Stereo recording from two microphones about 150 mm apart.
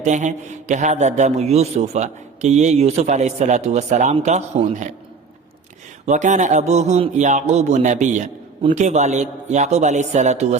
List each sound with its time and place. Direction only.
0.0 s a man's voice: 50° right (ahead or behind)
6.1 s a man's voice: 55° right (ahead or behind)